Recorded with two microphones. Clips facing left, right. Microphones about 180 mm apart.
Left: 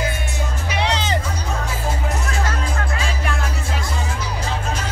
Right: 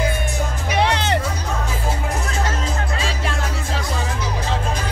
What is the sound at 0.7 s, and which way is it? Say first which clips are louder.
Music: right 3 dB; 55° right (ahead or behind).